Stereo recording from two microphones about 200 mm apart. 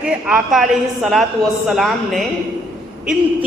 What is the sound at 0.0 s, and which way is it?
A woman's voice, 5° right (ahead or behind).